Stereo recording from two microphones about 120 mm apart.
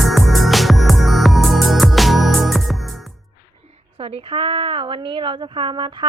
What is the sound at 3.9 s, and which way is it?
A woman's voice, 50° right (ahead or behind).